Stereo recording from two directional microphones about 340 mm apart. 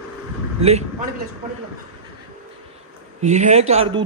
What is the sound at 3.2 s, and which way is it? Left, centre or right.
Speech, right.